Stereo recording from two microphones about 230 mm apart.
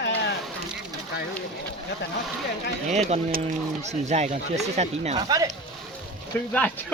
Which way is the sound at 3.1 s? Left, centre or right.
Right.